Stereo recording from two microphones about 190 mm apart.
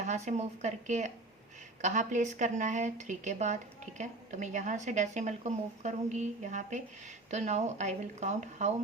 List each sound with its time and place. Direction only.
0.0 s a woman's voice: 40° right (ahead or behind)